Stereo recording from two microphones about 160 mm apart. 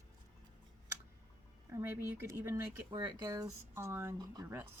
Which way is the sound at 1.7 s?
15° right (ahead or behind).